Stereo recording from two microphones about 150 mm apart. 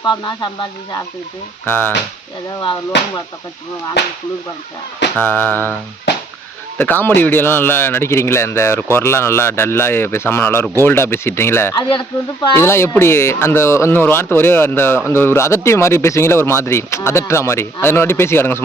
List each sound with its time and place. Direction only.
0.0 s speech: 30° left (ahead or behind)
1.6 s speech: 15° left (ahead or behind)
5.2 s speech: 10° left (ahead or behind)
11.8 s speech: 30° left (ahead or behind)
12.5 s speech: 15° left (ahead or behind)